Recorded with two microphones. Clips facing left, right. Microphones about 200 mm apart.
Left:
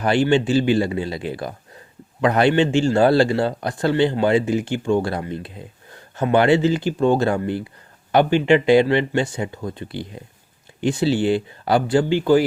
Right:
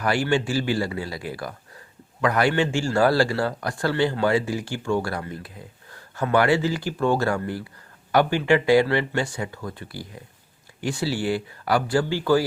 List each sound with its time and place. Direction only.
0.0 s speech: 20° left (ahead or behind)